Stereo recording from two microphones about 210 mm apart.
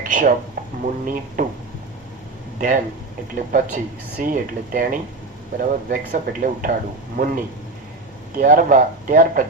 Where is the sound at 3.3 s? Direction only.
40° right (ahead or behind).